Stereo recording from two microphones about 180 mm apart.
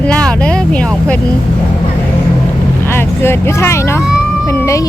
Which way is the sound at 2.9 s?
15° left (ahead or behind).